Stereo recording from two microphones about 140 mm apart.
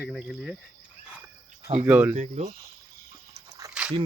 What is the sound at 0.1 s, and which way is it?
Cricket, centre (ahead or behind).